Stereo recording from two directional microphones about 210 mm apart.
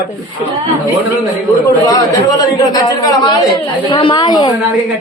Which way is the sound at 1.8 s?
20° left (ahead or behind).